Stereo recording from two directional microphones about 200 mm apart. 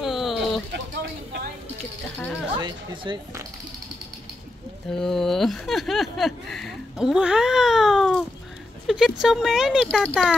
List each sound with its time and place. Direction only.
0.0 s a sound: centre (ahead or behind)
2.5 s speech: 25° right (ahead or behind)
4.9 s speech: centre (ahead or behind)